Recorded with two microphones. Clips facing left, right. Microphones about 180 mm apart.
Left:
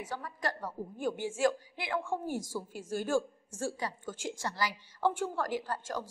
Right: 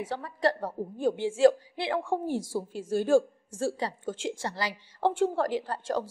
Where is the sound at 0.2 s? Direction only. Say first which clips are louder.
Right 9 dB; 30° right (ahead or behind).